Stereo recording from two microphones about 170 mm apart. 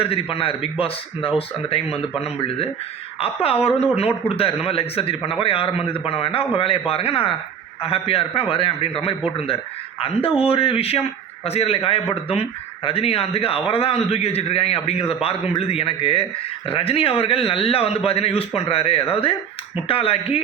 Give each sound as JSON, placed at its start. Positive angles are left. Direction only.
{"t": 0.0, "sound": "a man's voice", "side_deg": 35}